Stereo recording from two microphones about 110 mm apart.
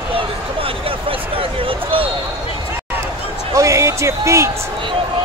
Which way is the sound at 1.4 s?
55° right (ahead or behind).